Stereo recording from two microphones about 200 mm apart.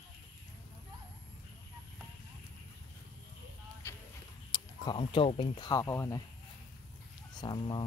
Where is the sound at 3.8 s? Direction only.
10° left (ahead or behind).